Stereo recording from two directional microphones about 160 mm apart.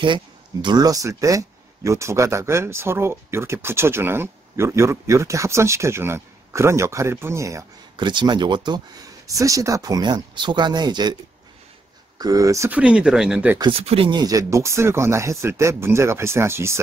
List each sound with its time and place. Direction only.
0.0 s speech: 30° right (ahead or behind)
12.2 s speech: 20° right (ahead or behind); by 13.6 s 5° right (ahead or behind)
13.6 s speech: 35° right (ahead or behind); by 16.8 s 15° right (ahead or behind)